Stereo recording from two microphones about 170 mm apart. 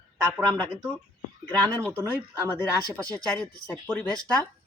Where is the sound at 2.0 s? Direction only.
15° left (ahead or behind).